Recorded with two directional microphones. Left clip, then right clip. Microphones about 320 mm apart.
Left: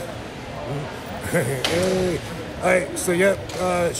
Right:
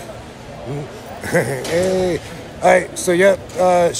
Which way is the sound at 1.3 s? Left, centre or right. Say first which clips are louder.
Right 6 dB; right.